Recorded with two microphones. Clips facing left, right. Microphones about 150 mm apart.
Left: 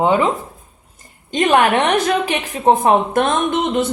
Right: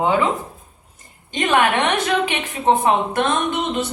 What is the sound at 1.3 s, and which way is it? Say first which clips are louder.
A woman's voice: left 4 dB; 40° left (ahead or behind).